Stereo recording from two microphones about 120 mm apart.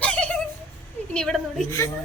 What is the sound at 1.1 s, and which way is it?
Speech, 5° left (ahead or behind).